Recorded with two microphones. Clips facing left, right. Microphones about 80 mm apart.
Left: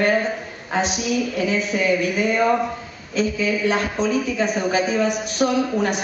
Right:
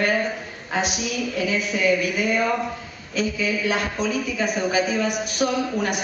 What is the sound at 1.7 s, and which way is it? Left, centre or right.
Speech, left.